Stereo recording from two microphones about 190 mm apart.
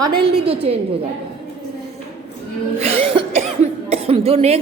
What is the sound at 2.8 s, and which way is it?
A woman's voice, 30° right (ahead or behind).